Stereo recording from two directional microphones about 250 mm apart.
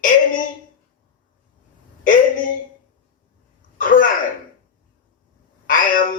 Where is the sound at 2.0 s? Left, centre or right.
Left.